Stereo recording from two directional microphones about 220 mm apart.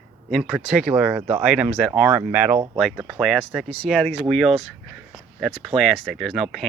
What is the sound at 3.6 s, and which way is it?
Speech, 25° right (ahead or behind).